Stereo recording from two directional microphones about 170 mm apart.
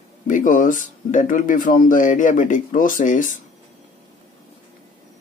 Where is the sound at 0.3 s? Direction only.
50° left (ahead or behind).